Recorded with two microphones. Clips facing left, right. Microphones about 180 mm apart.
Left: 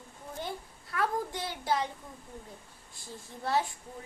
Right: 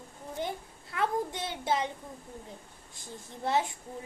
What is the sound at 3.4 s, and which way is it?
Speech, 20° right (ahead or behind).